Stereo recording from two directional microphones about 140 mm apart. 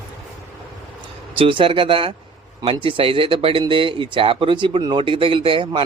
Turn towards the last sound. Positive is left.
turn(degrees=-35)  # may be behind; listen again after turning